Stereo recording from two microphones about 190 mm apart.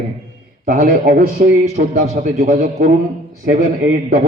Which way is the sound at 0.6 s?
50° right (ahead or behind).